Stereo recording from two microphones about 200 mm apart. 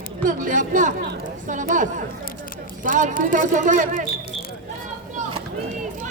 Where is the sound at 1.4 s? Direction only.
40° right (ahead or behind).